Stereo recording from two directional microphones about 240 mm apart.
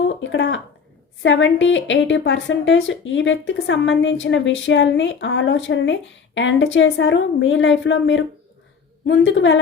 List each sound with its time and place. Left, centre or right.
0.0 s a woman's voice: left